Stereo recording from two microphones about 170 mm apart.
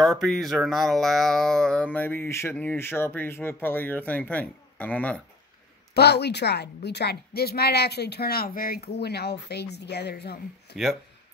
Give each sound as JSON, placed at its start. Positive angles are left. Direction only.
{"t": 0.2, "sound": "speech", "side_deg": 0}
{"t": 5.9, "sound": "a woman's voice", "side_deg": 75}